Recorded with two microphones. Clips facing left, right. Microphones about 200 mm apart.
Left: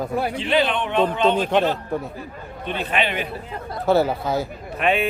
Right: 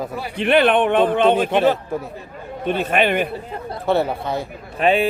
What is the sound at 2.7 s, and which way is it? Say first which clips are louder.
Speech: right 6 dB; 45° right (ahead or behind).